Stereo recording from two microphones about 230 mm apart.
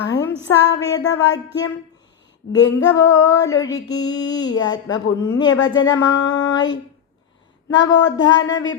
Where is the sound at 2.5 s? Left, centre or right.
Left.